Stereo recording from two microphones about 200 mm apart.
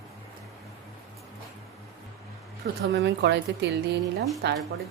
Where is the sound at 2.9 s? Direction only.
60° right (ahead or behind).